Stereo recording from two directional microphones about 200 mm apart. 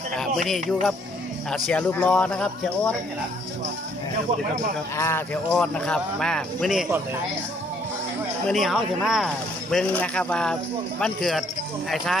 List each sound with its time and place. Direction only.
0.1 s speech: centre (ahead or behind)
4.9 s speech: 15° left (ahead or behind)
8.4 s speech: centre (ahead or behind)